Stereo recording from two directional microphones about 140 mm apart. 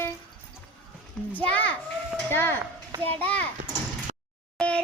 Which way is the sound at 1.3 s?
10° left (ahead or behind).